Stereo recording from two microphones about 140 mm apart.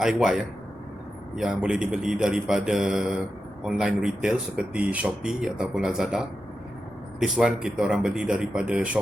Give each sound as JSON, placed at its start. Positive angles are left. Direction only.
{"t": 0.0, "sound": "speech", "side_deg": -5}